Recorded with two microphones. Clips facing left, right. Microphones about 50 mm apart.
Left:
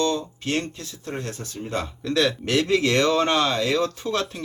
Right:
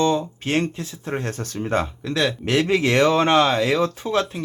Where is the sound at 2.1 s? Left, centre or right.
Centre.